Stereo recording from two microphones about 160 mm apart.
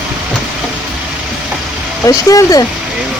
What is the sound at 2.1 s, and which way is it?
Speech, 20° left (ahead or behind).